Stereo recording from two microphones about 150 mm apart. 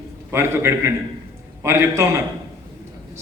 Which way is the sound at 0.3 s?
15° right (ahead or behind).